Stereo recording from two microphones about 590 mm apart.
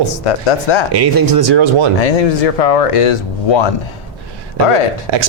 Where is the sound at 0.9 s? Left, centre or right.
Right.